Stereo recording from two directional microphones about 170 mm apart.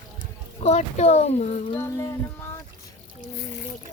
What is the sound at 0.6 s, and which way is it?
Speech, 40° left (ahead or behind).